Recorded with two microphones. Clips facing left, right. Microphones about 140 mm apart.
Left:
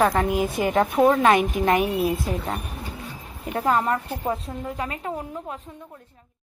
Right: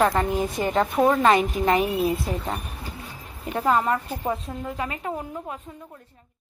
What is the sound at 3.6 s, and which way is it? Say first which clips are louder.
Speech: even; 5° right (ahead or behind).